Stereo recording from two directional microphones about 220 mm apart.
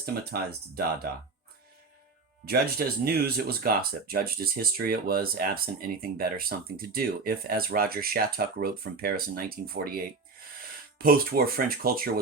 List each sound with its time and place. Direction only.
0.0 s speech: 45° right (ahead or behind)
2.5 s speech: 45° right (ahead or behind)